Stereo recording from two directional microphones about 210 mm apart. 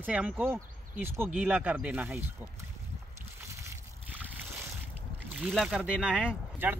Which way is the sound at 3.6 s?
10° right (ahead or behind).